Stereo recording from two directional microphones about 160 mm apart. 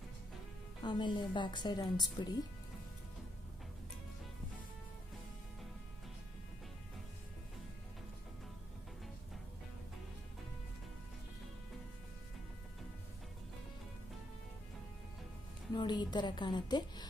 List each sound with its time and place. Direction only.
0.8 s speech: 30° left (ahead or behind)
15.7 s a woman's voice: 30° left (ahead or behind)